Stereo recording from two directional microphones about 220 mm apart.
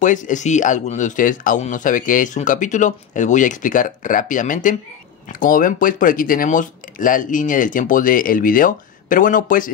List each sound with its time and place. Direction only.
0.0 s speech: 35° left (ahead or behind)